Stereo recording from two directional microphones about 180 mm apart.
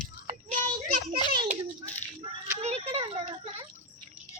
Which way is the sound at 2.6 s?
35° right (ahead or behind).